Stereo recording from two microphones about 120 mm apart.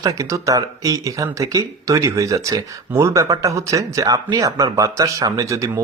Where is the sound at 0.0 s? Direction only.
25° right (ahead or behind).